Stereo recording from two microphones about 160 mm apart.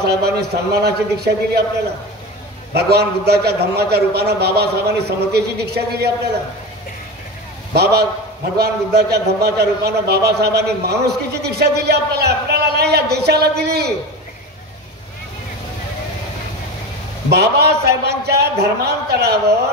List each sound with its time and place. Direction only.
0.0 s a man's voice: 90° right
2.7 s a man's voice: 90° right
7.7 s a man's voice: 90° right
17.3 s a man's voice: 90° right